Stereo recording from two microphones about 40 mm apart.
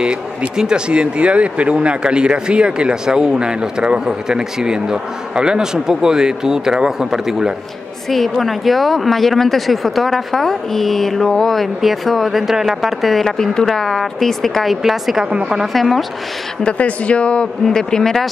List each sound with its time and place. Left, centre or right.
0.0 s speech: right
8.1 s speech: centre
14.8 s a woman's voice: centre
15.7 s speech: centre
16.6 s speech: left
17.6 s speech: centre